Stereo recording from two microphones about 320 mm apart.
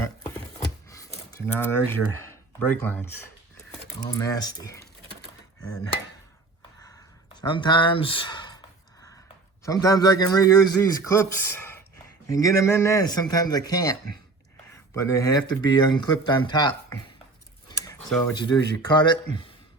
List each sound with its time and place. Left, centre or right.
0.9 s speech: centre
4.1 s a man's voice: centre
7.4 s a sound: centre
9.6 s a man's voice: centre
14.9 s a man's voice: centre
17.7 s a sound: centre
19.0 s a man's voice: centre